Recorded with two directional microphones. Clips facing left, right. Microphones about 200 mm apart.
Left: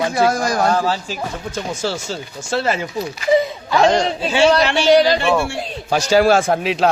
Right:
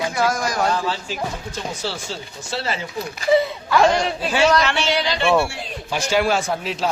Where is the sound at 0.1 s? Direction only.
30° left (ahead or behind); by 2.8 s 50° left (ahead or behind).